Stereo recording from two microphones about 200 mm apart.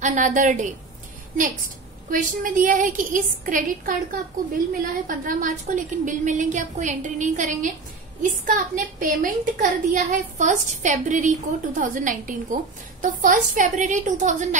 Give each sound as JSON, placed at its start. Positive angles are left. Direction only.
{"t": 0.0, "sound": "a woman's voice", "side_deg": -40}
{"t": 2.0, "sound": "a woman's voice", "side_deg": -40}